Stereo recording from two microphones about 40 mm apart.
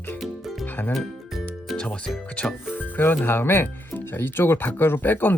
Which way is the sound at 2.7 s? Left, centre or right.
Left.